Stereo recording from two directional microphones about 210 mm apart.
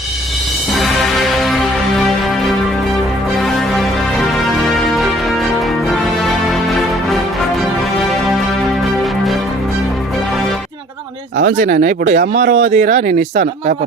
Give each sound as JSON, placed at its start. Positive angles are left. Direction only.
{"t": 0.8, "sound": "music", "side_deg": 0}
{"t": 11.6, "sound": "speech", "side_deg": -40}
{"t": 12.2, "sound": "speech", "side_deg": -50}
{"t": 12.5, "sound": "speech", "side_deg": -35}